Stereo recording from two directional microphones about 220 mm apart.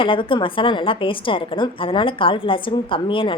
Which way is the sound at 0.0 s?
25° left (ahead or behind).